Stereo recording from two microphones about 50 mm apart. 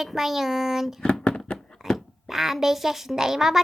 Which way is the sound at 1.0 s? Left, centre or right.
Centre.